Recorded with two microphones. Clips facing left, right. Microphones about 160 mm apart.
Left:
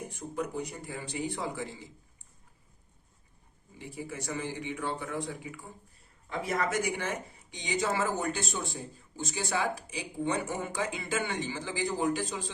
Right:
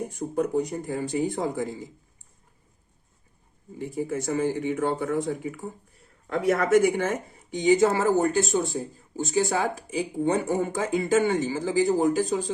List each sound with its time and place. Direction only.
0.0 s speech: 45° right (ahead or behind)
3.8 s speech: 50° right (ahead or behind)
6.2 s speech: 70° right (ahead or behind); by 12.5 s 45° right (ahead or behind)